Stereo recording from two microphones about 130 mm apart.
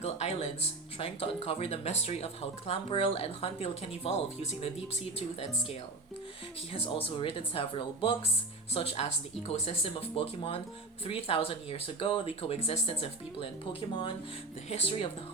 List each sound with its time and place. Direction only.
0.0 s speech: 55° left (ahead or behind)
6.7 s speech: 45° left (ahead or behind)
14.7 s speech: 50° left (ahead or behind)